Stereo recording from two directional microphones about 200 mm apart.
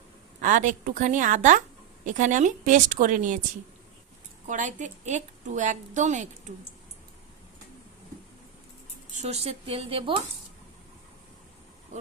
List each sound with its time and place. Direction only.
0.4 s a woman's voice: 40° right (ahead or behind)
4.4 s a woman's voice: 40° right (ahead or behind)
9.1 s speech: 30° right (ahead or behind)